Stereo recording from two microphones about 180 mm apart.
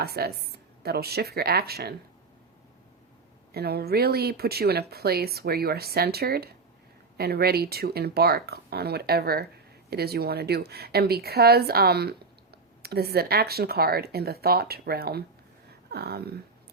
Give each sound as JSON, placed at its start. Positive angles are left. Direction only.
{"t": 0.0, "sound": "speech", "side_deg": -60}
{"t": 3.5, "sound": "speech", "side_deg": -60}